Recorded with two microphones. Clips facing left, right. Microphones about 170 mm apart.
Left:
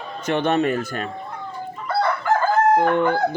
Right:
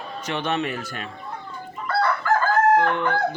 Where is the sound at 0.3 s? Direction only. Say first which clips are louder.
Left 6 dB; 50° left (ahead or behind).